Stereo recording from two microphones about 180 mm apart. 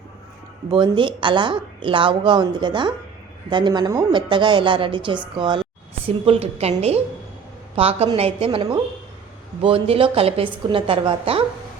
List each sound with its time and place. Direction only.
0.7 s a woman's voice: 30° right (ahead or behind)